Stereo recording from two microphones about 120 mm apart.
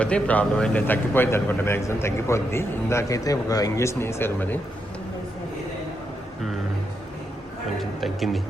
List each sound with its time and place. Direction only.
0.0 s a man's voice: 10° left (ahead or behind)
7.8 s speech: centre (ahead or behind)